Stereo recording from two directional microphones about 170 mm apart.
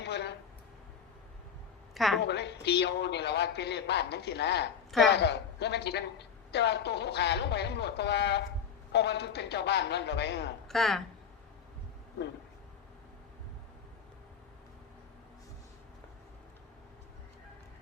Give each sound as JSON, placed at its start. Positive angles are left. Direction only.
{"t": 0.0, "sound": "a sound", "side_deg": 85}
{"t": 2.2, "sound": "a woman's voice", "side_deg": 85}
{"t": 10.7, "sound": "speech", "side_deg": 0}